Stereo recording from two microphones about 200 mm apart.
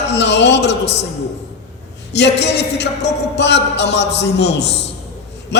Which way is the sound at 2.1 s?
60° left (ahead or behind).